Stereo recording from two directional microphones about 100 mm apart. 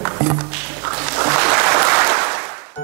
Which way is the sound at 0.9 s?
15° right (ahead or behind).